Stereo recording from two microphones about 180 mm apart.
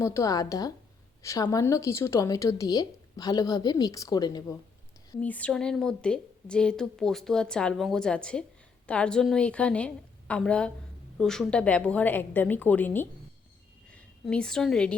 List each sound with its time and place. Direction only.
0.0 s a woman's voice: 15° left (ahead or behind)
5.2 s a woman's voice: 10° left (ahead or behind)